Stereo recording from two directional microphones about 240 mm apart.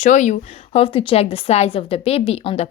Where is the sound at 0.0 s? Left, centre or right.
Left.